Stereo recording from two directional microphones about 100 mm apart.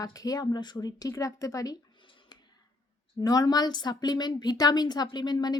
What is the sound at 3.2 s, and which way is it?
Speech, 40° left (ahead or behind).